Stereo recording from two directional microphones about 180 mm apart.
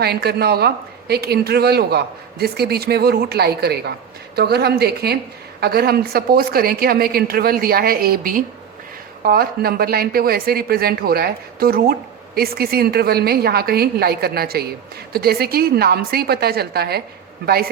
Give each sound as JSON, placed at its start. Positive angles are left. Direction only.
{"t": 0.0, "sound": "speech", "side_deg": -65}